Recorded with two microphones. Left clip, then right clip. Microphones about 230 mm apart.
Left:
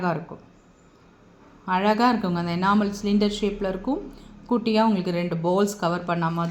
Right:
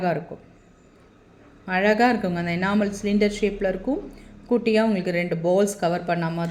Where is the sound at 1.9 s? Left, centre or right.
Left.